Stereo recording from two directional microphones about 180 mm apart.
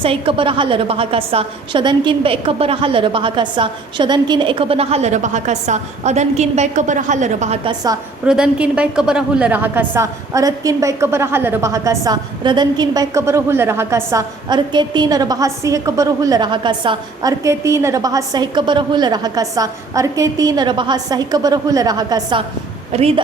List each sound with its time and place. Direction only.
0.0 s a woman's voice: 30° right (ahead or behind)
8.3 s a woman's voice: 5° right (ahead or behind); by 22.4 s 25° right (ahead or behind)
22.9 s a woman's voice: 35° right (ahead or behind)